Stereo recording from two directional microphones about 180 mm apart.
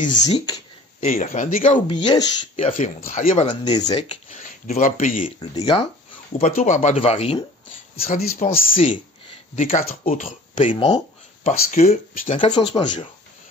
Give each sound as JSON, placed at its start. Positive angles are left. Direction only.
{"t": 0.0, "sound": "speech", "side_deg": 45}
{"t": 1.9, "sound": "speech", "side_deg": 25}
{"t": 5.2, "sound": "speech", "side_deg": 20}
{"t": 6.3, "sound": "speech", "side_deg": 40}
{"t": 8.1, "sound": "speech", "side_deg": 50}
{"t": 8.7, "sound": "a sound", "side_deg": 30}
{"t": 9.6, "sound": "speech", "side_deg": 35}
{"t": 10.6, "sound": "speech", "side_deg": 25}
{"t": 11.4, "sound": "speech", "side_deg": 40}
{"t": 12.4, "sound": "speech", "side_deg": 25}